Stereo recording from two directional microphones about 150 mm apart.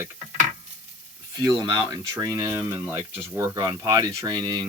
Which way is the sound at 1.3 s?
25° right (ahead or behind).